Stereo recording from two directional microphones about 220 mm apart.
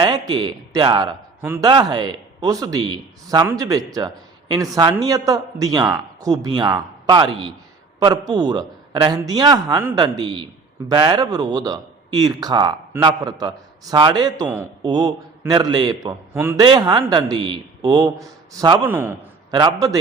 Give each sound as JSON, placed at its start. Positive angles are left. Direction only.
{"t": 0.0, "sound": "a man's voice", "side_deg": -20}
{"t": 16.6, "sound": "a man's voice", "side_deg": -20}